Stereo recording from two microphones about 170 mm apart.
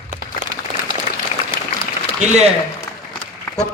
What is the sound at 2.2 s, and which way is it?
Speech, 40° right (ahead or behind).